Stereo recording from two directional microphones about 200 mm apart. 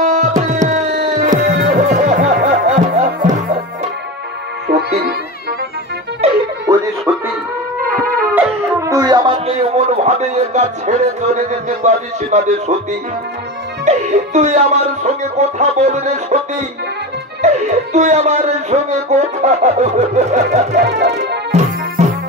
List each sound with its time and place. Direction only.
0.0 s tabla: 35° right (ahead or behind)
1.4 s music: 55° right (ahead or behind)
1.9 s music: 35° right (ahead or behind)
4.6 s music: 55° right (ahead or behind)
6.2 s music: 30° right (ahead or behind)
6.6 s music: 15° right (ahead or behind)
7.8 s music: 45° right (ahead or behind)
8.4 s dog: 15° right (ahead or behind); by 12.7 s 35° right (ahead or behind)
13.8 s speech: 35° right (ahead or behind)
20.8 s music: 60° right (ahead or behind)
21.5 s music: 35° right (ahead or behind)